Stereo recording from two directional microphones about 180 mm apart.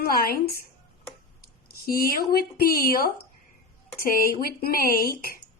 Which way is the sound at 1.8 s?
55° left (ahead or behind).